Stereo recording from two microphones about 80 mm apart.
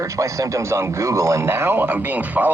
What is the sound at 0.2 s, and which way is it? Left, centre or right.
Speech, right.